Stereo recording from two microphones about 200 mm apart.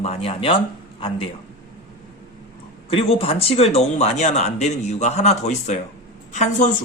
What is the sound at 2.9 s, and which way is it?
Speech, 30° left (ahead or behind).